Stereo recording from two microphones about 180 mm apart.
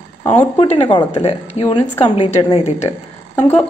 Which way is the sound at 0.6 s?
25° left (ahead or behind).